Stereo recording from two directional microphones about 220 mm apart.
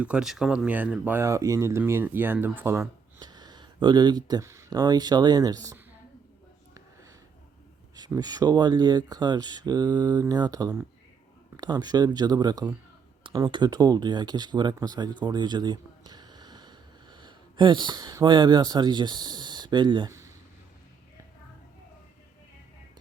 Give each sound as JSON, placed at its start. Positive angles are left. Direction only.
{"t": 0.0, "sound": "speech", "side_deg": -5}
{"t": 7.9, "sound": "speech", "side_deg": -20}